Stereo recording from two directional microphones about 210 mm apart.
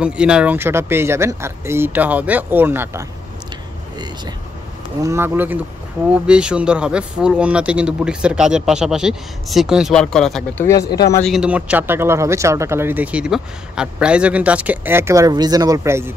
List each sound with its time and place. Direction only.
0.0 s speech: 5° right (ahead or behind)
5.0 s speech: 10° right (ahead or behind)
10.8 s speech: 50° left (ahead or behind)
11.2 s speech: 5° right (ahead or behind)